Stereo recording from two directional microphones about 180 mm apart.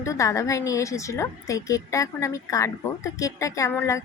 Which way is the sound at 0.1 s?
15° left (ahead or behind).